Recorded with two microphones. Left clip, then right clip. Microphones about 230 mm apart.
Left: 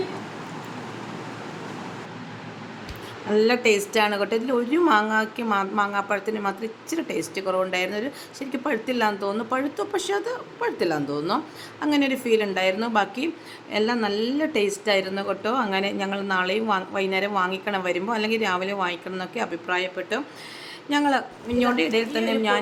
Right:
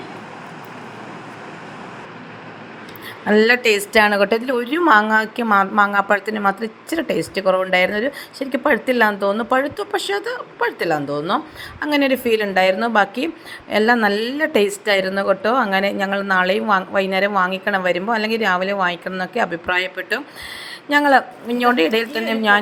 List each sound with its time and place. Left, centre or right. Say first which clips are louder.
3.2 s a woman's voice: right 5 dB; right